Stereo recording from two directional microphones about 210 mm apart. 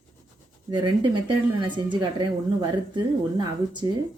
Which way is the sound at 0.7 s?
20° right (ahead or behind).